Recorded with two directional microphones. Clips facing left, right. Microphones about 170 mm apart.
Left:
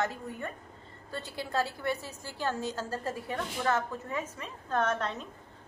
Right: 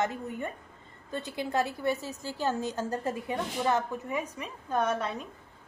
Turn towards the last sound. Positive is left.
turn(degrees=-10)  # may be behind; listen again after turning